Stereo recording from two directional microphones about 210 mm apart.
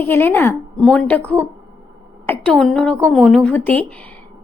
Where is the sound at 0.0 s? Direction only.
10° left (ahead or behind).